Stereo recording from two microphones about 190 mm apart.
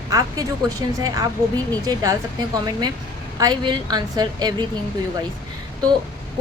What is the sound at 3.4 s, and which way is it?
Speech, 20° right (ahead or behind).